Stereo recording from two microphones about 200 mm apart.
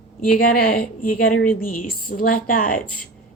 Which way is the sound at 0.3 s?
45° left (ahead or behind).